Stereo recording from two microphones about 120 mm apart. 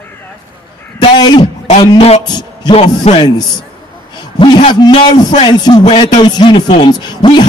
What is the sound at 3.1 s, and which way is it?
Speech, 60° left (ahead or behind).